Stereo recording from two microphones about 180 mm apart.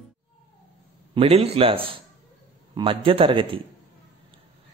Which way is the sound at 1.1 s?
35° right (ahead or behind).